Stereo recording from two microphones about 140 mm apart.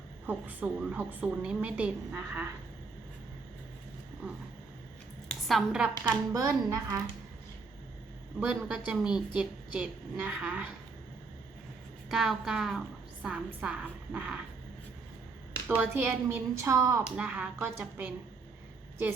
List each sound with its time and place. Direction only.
0.3 s a woman's voice: 10° right (ahead or behind)
5.3 s a woman's voice: centre (ahead or behind)
6.3 s a woman's voice: 25° right (ahead or behind)
8.4 s a woman's voice: 5° right (ahead or behind)
12.0 s a woman's voice: centre (ahead or behind)
15.6 s a woman's voice: 10° right (ahead or behind)
17.2 s a woman's voice: 10° right (ahead or behind)